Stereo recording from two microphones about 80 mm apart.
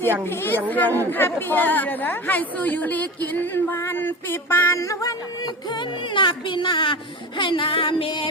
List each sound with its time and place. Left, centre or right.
0.3 s speech: left
4.8 s music: left
5.7 s speech: left